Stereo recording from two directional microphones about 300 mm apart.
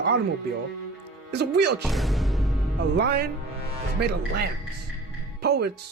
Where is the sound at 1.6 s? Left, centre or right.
Right.